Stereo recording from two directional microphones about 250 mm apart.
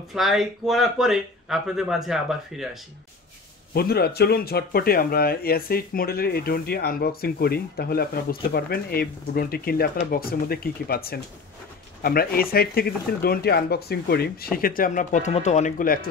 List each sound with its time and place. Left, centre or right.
0.1 s speech: centre
3.7 s speech: left